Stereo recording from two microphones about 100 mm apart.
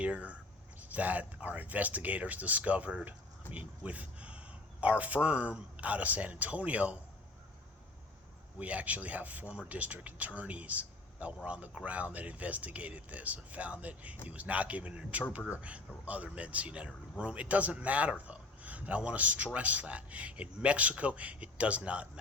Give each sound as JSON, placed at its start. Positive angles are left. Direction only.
{"t": 0.0, "sound": "a man's voice", "side_deg": -15}
{"t": 8.5, "sound": "a man's voice", "side_deg": -15}